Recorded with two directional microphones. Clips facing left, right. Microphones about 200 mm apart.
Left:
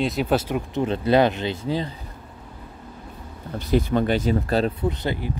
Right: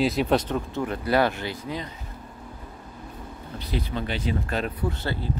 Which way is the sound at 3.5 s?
50° left (ahead or behind).